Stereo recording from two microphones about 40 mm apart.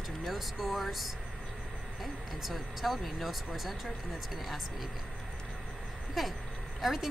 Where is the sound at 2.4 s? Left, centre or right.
Centre.